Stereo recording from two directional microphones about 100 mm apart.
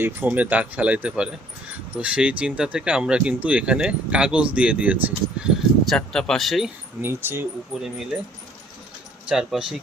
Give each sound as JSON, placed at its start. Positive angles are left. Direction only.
{"t": 0.3, "sound": "speech", "side_deg": -15}
{"t": 5.8, "sound": "speech", "side_deg": 5}
{"t": 7.0, "sound": "speech", "side_deg": -20}
{"t": 7.8, "sound": "speech", "side_deg": -5}
{"t": 9.3, "sound": "speech", "side_deg": -5}